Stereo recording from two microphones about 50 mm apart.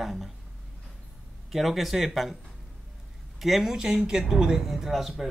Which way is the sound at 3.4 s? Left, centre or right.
Centre.